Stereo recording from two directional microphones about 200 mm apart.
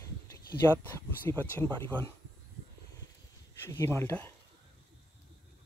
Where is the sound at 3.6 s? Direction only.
10° left (ahead or behind).